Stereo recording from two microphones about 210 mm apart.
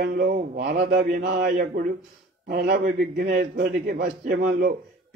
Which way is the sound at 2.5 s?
45° right (ahead or behind).